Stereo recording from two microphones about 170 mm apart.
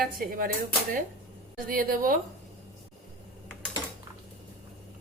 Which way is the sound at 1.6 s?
55° right (ahead or behind).